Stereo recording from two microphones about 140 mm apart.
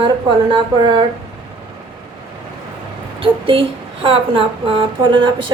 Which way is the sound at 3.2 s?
40° right (ahead or behind).